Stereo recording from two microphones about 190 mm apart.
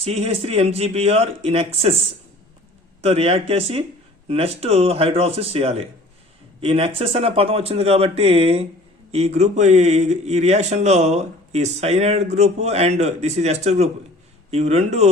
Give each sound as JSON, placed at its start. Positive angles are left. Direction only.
{"t": 0.0, "sound": "speech", "side_deg": -35}
{"t": 3.0, "sound": "speech", "side_deg": -35}